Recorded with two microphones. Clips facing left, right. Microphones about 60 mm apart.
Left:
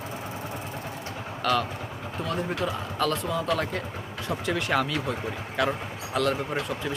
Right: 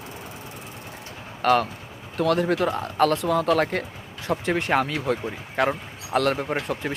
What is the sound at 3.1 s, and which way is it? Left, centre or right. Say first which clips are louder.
Speech: right 6 dB; right.